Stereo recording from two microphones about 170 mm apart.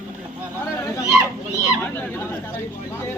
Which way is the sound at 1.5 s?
15° left (ahead or behind).